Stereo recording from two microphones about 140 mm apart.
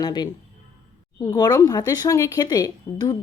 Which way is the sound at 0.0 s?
30° left (ahead or behind).